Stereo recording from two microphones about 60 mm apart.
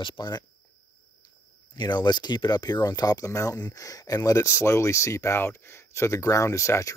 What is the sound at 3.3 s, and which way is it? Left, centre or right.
Speech, left.